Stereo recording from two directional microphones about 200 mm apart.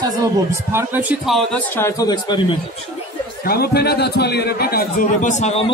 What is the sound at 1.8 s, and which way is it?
Speech, 15° left (ahead or behind).